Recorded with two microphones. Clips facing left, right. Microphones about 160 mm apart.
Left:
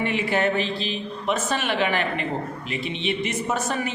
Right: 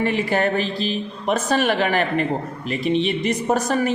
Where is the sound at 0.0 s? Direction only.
40° right (ahead or behind).